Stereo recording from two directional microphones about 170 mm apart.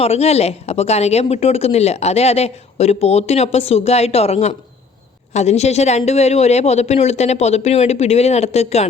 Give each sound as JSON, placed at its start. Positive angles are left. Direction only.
{"t": 0.0, "sound": "speech", "side_deg": 35}